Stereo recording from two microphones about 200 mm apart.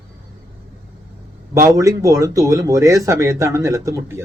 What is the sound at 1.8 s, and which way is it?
Speech, 15° right (ahead or behind).